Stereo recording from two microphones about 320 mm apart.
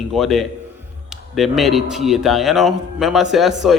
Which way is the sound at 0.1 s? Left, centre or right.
Centre.